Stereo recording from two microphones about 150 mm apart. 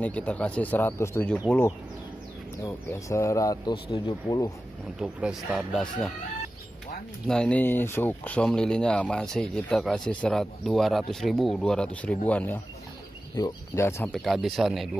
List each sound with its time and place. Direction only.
0.0 s speech: 10° left (ahead or behind)
2.6 s speech: 20° left (ahead or behind)
3.7 s speech: 35° left (ahead or behind)
4.9 s speech: 5° right (ahead or behind)
7.2 s speech: 5° left (ahead or behind)
14.1 s speech: centre (ahead or behind)